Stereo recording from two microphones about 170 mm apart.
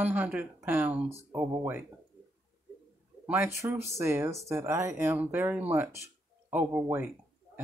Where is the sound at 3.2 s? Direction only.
15° right (ahead or behind).